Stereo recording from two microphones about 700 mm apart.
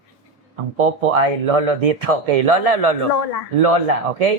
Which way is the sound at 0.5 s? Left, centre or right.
Right.